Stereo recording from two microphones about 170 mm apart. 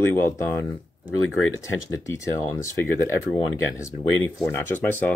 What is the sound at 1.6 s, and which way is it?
Speech, 20° left (ahead or behind).